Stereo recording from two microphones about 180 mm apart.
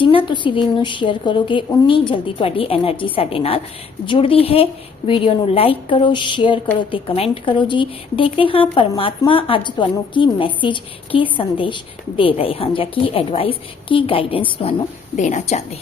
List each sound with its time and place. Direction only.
0.0 s a woman's voice: 30° left (ahead or behind)